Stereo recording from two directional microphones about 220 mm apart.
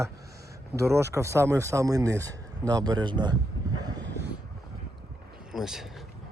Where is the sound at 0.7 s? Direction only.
10° right (ahead or behind).